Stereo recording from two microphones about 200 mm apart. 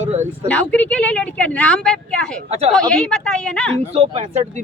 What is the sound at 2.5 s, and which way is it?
Speech, 30° right (ahead or behind).